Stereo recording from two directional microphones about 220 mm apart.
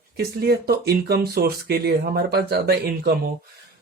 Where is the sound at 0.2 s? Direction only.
45° right (ahead or behind).